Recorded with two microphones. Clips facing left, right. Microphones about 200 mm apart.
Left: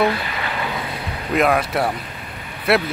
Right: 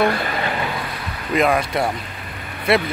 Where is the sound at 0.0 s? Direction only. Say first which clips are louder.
Right 1 dB; 50° right (ahead or behind).